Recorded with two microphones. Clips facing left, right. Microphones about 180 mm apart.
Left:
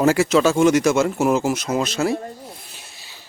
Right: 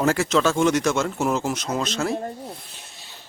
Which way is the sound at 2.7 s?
5° left (ahead or behind).